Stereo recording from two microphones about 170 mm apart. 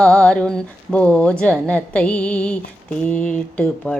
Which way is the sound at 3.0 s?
5° left (ahead or behind).